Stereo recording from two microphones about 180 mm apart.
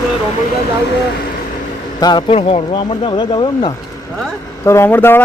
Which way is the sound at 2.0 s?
25° left (ahead or behind).